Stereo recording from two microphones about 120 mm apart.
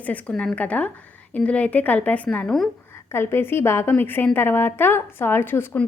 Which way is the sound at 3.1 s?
20° left (ahead or behind).